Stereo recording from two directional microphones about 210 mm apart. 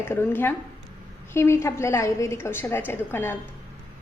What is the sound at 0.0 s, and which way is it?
A woman's voice, 10° left (ahead or behind).